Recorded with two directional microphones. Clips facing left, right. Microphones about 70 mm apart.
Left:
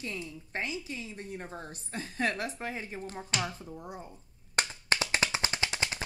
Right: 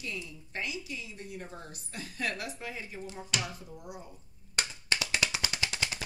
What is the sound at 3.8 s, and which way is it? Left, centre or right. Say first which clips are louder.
Clapping: left 2 dB; left.